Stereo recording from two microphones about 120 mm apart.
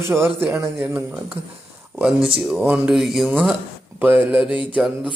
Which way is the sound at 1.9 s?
5° right (ahead or behind).